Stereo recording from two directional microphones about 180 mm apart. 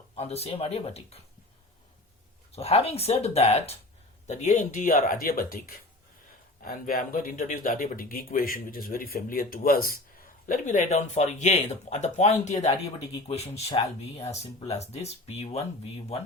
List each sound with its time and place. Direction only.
0.2 s speech: 35° left (ahead or behind)
2.5 s speech: 35° left (ahead or behind)